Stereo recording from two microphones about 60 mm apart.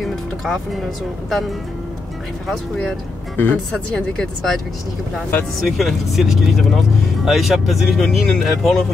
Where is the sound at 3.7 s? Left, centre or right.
Centre.